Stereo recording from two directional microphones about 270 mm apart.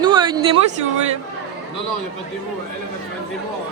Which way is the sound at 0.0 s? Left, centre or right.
Centre.